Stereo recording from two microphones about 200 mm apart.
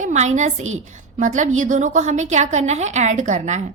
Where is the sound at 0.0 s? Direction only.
35° right (ahead or behind).